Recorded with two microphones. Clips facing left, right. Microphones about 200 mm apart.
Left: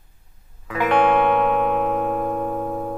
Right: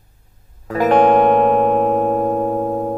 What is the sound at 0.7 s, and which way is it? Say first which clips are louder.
Music: right 5 dB; 40° right (ahead or behind).